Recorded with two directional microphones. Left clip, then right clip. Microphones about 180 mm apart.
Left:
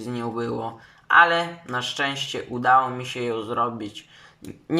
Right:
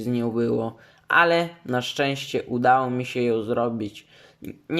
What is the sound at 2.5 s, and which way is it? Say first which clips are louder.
Speech: left 1 dB; 30° right (ahead or behind).